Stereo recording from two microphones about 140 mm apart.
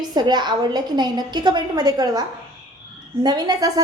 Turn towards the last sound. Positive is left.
turn(degrees=-30)  # may be behind; listen again after turning